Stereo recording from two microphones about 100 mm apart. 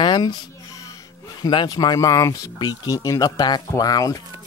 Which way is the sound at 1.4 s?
45° left (ahead or behind).